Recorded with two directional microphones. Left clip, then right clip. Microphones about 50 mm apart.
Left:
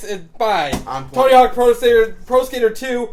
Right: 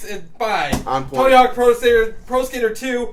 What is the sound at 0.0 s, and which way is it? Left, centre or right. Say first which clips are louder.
Speech: left 4 dB; left.